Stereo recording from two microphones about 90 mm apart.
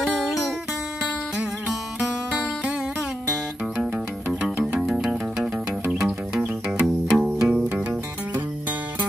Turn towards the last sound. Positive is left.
turn(degrees=-10)  # may be behind; listen again after turning